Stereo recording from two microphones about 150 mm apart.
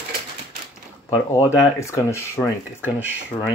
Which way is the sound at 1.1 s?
20° left (ahead or behind).